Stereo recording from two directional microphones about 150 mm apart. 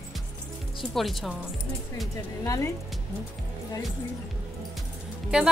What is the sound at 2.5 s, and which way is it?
Speech, 20° left (ahead or behind).